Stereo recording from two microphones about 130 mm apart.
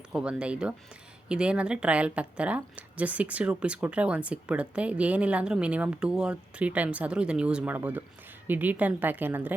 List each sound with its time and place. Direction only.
0.1 s a woman's voice: 5° right (ahead or behind)